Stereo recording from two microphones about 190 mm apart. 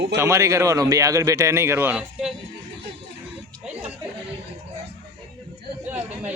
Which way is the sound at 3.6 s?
5° right (ahead or behind).